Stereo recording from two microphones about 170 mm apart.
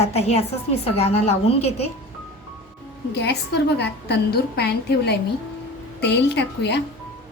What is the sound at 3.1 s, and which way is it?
A woman's voice, 80° left.